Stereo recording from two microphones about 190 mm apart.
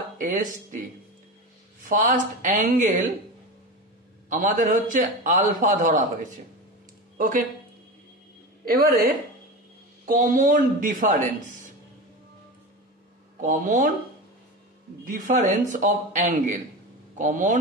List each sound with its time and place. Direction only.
0.2 s a man's voice: 45° right (ahead or behind)
1.9 s a man's voice: 45° right (ahead or behind)
4.3 s a man's voice: 45° right (ahead or behind)
8.6 s a man's voice: 50° right (ahead or behind)
13.4 s a man's voice: 45° right (ahead or behind)
15.0 s a man's voice: 40° right (ahead or behind)